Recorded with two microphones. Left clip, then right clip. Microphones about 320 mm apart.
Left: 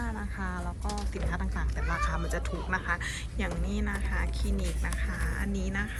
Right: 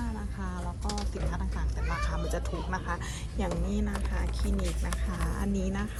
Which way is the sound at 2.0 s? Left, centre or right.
Centre.